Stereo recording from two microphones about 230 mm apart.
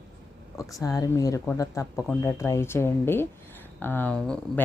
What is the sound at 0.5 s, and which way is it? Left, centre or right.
Speech, centre.